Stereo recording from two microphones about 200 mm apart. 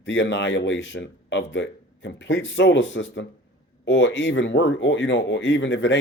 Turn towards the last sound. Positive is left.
turn(degrees=65)  # may be behind; listen again after turning